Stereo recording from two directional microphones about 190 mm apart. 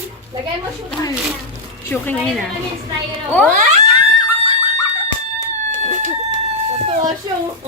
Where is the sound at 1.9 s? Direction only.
5° left (ahead or behind).